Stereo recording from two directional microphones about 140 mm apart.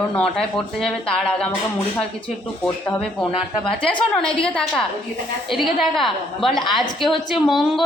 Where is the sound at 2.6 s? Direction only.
5° left (ahead or behind).